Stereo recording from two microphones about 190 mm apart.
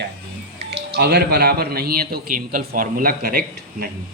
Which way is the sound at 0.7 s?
55° right (ahead or behind).